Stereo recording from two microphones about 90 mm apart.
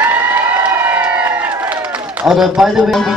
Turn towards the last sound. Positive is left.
turn(degrees=0)  # may be behind; listen again after turning